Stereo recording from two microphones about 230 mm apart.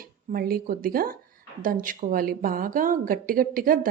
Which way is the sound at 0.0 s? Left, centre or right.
Right.